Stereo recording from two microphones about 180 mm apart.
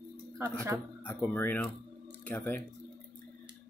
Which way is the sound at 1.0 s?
10° left (ahead or behind).